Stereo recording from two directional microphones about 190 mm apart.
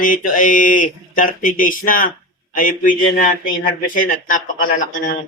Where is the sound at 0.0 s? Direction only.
45° left (ahead or behind).